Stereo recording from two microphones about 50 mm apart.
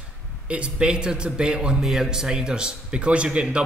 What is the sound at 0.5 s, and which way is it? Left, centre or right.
A man's voice, right.